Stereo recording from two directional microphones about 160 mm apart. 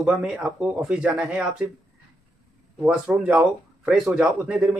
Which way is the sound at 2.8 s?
5° right (ahead or behind).